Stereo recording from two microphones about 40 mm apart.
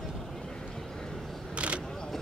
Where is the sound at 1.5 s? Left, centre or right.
Right.